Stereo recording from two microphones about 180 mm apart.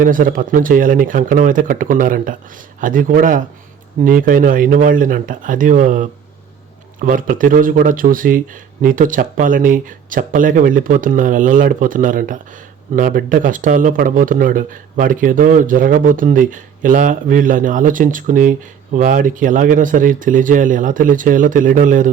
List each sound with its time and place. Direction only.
0.0 s speech: 50° right (ahead or behind)